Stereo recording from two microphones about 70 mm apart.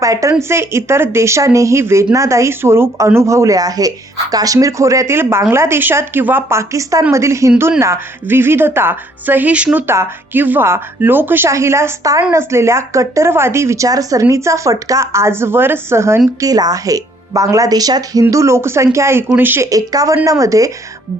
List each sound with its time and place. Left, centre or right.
0.0 s a woman's voice: right
0.4 s a woman's voice: right
9.7 s a woman's voice: right
10.4 s speech: right
11.4 s a woman's voice: right
16.4 s a woman's voice: right
19.4 s speech: right
19.6 s a woman's voice: right